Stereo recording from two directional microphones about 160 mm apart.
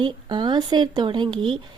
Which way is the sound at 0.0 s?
30° right (ahead or behind).